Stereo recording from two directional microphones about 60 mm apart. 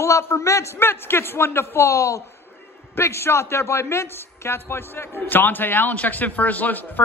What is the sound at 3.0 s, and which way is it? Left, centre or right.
A man's voice, left.